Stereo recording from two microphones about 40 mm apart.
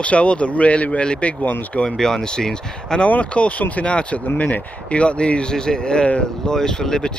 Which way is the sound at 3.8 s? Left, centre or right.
Left.